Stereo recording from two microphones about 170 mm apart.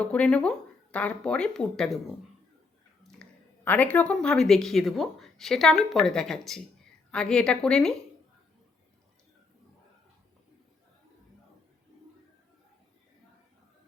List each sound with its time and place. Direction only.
0.0 s a woman's voice: 5° left (ahead or behind)
3.0 s a sound: centre (ahead or behind)
3.6 s a woman's voice: 10° left (ahead or behind)